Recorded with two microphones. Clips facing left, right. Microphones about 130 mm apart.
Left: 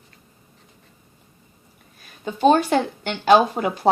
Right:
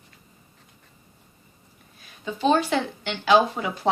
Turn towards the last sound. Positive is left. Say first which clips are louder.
# left 5 dB
turn(degrees=50)  # may be behind; listen again after turning